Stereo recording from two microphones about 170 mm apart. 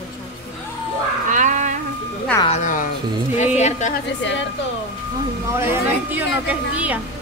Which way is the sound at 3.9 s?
90° left.